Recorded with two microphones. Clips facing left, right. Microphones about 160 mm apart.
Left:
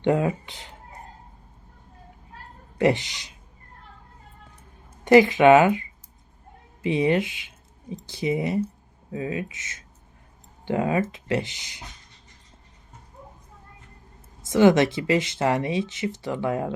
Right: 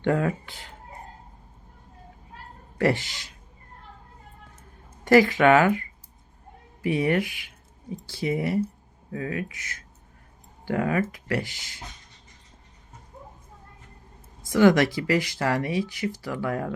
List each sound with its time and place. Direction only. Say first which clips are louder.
0.0 s speech: left 2 dB; 20° left (ahead or behind)
2.7 s speech: left 2 dB; 20° left (ahead or behind)
5.0 s speech: left 3 dB; 20° left (ahead or behind)
14.4 s speech: left 1 dB; 25° left (ahead or behind)